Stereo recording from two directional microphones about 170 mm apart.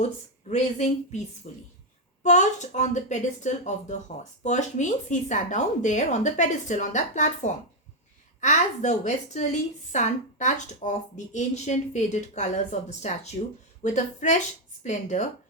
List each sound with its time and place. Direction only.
0.0 s speech: 40° left (ahead or behind)
1.5 s speech: 50° left (ahead or behind)